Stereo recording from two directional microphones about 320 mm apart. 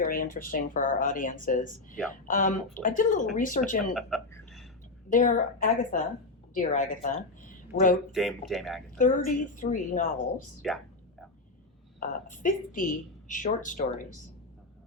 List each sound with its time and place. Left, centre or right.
0.0 s speech: left
3.9 s a sound: centre
5.0 s a woman's voice: left
8.1 s speech: centre
9.0 s speech: left
10.6 s speech: centre
11.9 s speech: left